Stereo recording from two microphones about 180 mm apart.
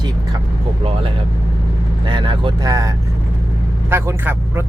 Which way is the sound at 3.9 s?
15° right (ahead or behind).